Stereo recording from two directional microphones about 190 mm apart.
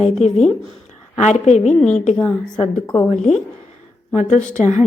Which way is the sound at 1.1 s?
35° left (ahead or behind).